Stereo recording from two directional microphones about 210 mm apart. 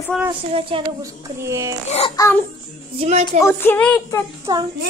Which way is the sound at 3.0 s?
30° right (ahead or behind).